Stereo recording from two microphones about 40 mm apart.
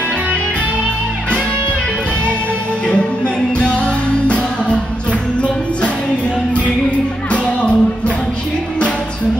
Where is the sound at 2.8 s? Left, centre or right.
Left.